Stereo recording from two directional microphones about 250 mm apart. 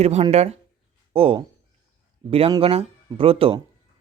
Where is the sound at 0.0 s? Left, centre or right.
Right.